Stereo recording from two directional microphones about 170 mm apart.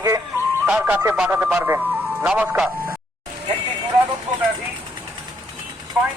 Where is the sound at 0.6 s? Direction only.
5° right (ahead or behind).